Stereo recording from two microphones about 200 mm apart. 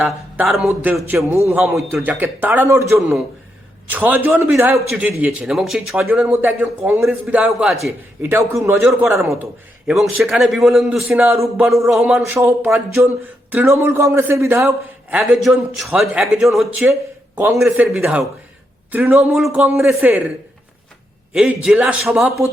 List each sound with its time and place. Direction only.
0.0 s a man's voice: 5° right (ahead or behind)
1.3 s a man's voice: 15° right (ahead or behind)
3.8 s a man's voice: 10° right (ahead or behind)
7.9 s a man's voice: 15° right (ahead or behind)
9.8 s a man's voice: centre (ahead or behind)
21.3 s a man's voice: 5° right (ahead or behind)